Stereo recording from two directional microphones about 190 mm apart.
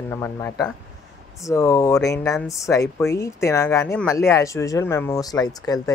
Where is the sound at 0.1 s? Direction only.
15° left (ahead or behind).